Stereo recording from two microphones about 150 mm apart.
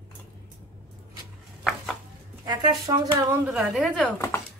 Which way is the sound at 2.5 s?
25° right (ahead or behind).